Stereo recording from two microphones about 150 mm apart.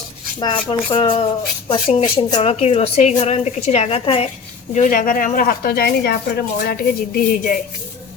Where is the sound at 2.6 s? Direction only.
40° left (ahead or behind).